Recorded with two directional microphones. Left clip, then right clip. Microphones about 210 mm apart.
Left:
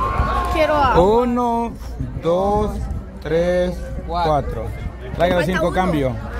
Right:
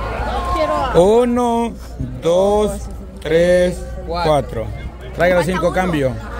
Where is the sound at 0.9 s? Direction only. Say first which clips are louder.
Right 3 dB; 15° right (ahead or behind).